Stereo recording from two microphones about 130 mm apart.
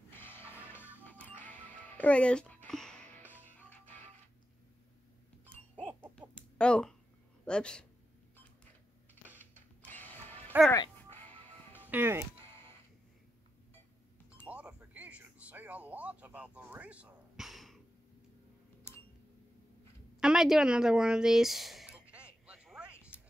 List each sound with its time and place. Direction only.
0.1 s music: 15° left (ahead or behind)
0.5 s music: 15° right (ahead or behind)
1.0 s music: 15° left (ahead or behind)
6.6 s speech: 5° left (ahead or behind)
9.4 s printer: 15° left (ahead or behind)
10.5 s speech: 15° right (ahead or behind)
11.9 s speech: 15° right (ahead or behind)
14.5 s a sound: 10° right (ahead or behind)
20.2 s a woman's voice: 5° right (ahead or behind)
22.1 s a sound: 10° right (ahead or behind)